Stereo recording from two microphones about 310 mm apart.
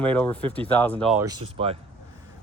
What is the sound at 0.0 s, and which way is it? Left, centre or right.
Speech, centre.